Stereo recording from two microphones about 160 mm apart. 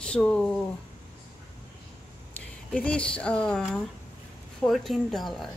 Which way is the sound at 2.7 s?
5° left (ahead or behind).